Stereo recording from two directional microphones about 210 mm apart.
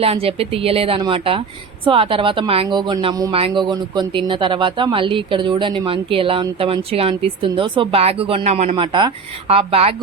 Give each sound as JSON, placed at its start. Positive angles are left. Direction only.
{"t": 0.0, "sound": "a woman's voice", "side_deg": -30}